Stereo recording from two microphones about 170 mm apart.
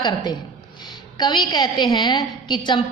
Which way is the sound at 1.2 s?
25° left (ahead or behind).